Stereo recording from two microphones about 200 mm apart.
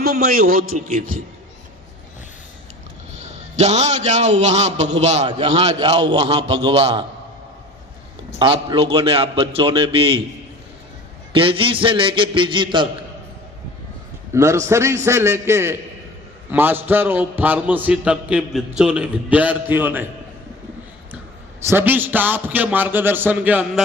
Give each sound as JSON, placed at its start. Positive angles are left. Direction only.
{"t": 0.0, "sound": "a man's voice", "side_deg": -50}
{"t": 3.5, "sound": "a man's voice", "side_deg": -35}
{"t": 8.4, "sound": "a man's voice", "side_deg": -25}
{"t": 11.3, "sound": "a man's voice", "side_deg": -25}
{"t": 14.3, "sound": "a man's voice", "side_deg": -15}
{"t": 21.7, "sound": "a man's voice", "side_deg": -10}